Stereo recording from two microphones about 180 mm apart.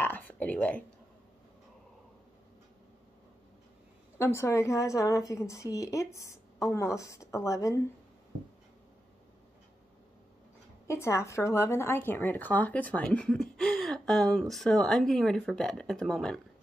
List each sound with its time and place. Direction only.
0.0 s a sound: 10° left (ahead or behind)
4.2 s a woman's voice: 15° left (ahead or behind)
10.9 s speech: 15° left (ahead or behind)